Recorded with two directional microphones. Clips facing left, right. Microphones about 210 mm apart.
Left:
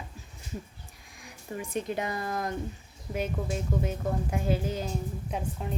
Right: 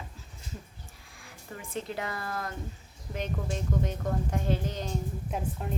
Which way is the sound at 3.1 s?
5° left (ahead or behind).